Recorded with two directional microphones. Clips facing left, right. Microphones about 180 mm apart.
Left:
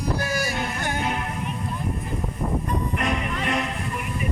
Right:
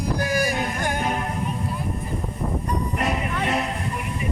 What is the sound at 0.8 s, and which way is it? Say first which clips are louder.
Music: right 2 dB; 45° right (ahead or behind).